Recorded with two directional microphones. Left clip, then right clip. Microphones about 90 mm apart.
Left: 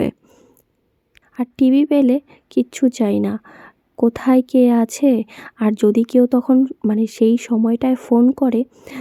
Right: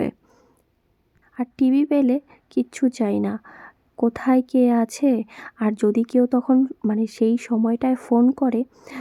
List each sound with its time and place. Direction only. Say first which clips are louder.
1.4 s a woman's voice: left 5 dB; 25° left (ahead or behind)